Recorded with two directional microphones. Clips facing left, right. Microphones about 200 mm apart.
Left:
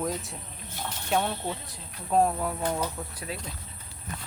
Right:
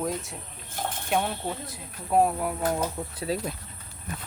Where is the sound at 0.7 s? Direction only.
50° right (ahead or behind).